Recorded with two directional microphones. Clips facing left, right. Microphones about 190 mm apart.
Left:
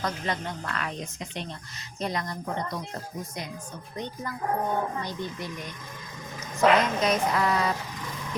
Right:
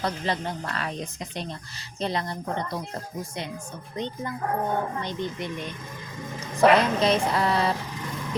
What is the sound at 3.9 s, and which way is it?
A woman's voice, 20° right (ahead or behind).